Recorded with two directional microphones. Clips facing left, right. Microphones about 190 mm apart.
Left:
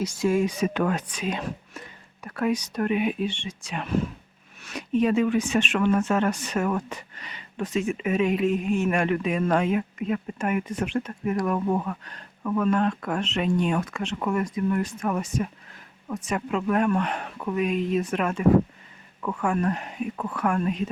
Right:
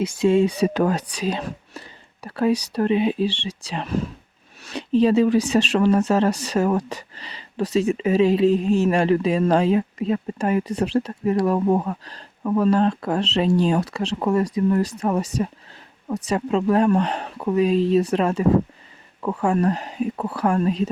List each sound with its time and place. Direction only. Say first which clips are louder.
0.2 s speech: right 6 dB; 25° right (ahead or behind)
0.6 s speech: right 5 dB; 35° right (ahead or behind)